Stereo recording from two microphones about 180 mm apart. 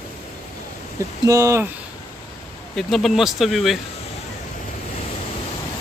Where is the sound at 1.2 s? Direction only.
20° right (ahead or behind).